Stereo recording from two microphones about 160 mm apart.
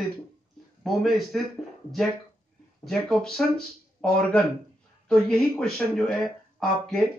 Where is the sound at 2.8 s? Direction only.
Centre (ahead or behind).